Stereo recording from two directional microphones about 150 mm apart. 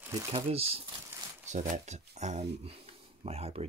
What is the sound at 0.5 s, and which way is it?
Speech, 40° right (ahead or behind).